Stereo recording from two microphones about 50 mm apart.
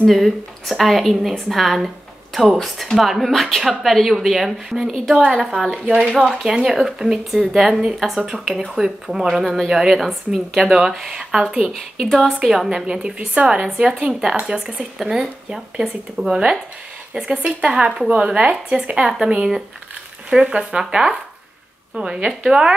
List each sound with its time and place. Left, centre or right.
0.1 s speech: centre
5.1 s speech: centre
5.5 s speech: centre
11.7 s speech: centre
12.4 s speech: centre
15.0 s speech: centre